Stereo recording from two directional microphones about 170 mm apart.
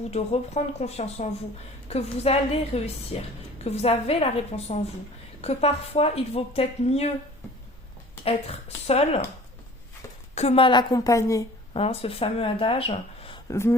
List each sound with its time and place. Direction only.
0.1 s a woman's voice: 40° left (ahead or behind)
8.2 s a woman's voice: 35° left (ahead or behind)
10.3 s a woman's voice: 35° left (ahead or behind); by 11.4 s 20° left (ahead or behind)
11.7 s speech: 35° left (ahead or behind)
13.5 s speech: 15° left (ahead or behind)